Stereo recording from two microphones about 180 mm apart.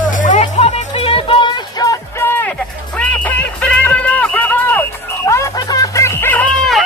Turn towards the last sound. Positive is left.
turn(degrees=5)  # may be behind; listen again after turning